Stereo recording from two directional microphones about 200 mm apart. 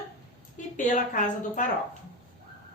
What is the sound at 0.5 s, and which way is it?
A woman's voice, 40° left (ahead or behind).